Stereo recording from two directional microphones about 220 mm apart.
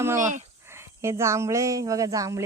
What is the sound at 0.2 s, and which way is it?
Speech, 35° right (ahead or behind).